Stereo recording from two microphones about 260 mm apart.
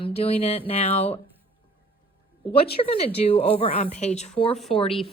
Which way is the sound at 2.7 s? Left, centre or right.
Left.